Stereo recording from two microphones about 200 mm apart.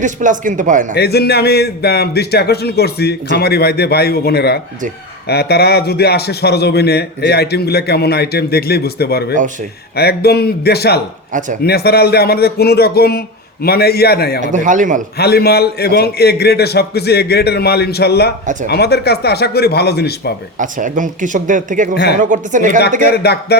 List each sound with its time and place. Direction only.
0.0 s speech: 40° right (ahead or behind)
0.9 s a man's voice: 55° left (ahead or behind)
11.3 s speech: 40° right (ahead or behind)
11.6 s a man's voice: 50° left (ahead or behind)
14.4 s speech: 40° right (ahead or behind)
15.2 s a man's voice: 50° left (ahead or behind)
20.6 s speech: 40° right (ahead or behind)
23.0 s a man's voice: 55° left (ahead or behind)